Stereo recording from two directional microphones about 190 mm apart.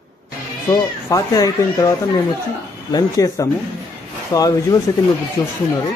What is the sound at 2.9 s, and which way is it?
Speech, 15° left (ahead or behind).